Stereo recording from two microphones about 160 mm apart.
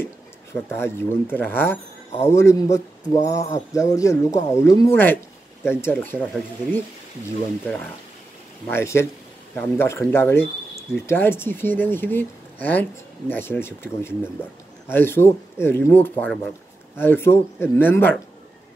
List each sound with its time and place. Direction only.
0.0 s speech: 15° left (ahead or behind)
8.6 s speech: 15° left (ahead or behind)